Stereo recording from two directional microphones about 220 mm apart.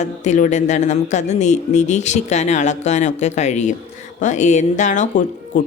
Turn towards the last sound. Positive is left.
turn(degrees=35)  # may be behind; listen again after turning